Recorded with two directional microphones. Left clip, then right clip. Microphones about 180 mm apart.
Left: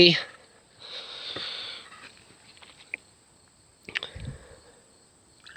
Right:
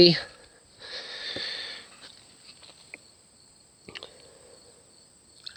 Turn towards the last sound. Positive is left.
turn(degrees=0)  # may be behind; listen again after turning